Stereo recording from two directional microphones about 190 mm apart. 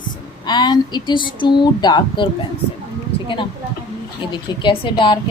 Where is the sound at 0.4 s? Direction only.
20° left (ahead or behind).